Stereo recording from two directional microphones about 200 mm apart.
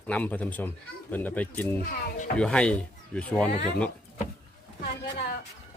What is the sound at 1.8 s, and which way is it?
Speech, 45° left (ahead or behind).